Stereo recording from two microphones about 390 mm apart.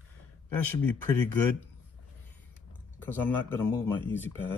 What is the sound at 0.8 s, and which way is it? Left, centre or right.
Speech, centre.